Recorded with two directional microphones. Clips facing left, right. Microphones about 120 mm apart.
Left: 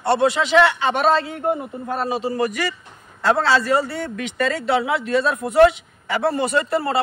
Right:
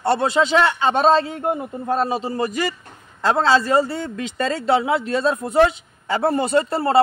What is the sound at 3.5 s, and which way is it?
A man's voice, 25° right (ahead or behind).